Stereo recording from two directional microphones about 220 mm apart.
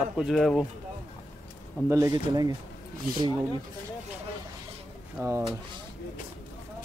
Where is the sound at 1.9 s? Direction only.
15° right (ahead or behind).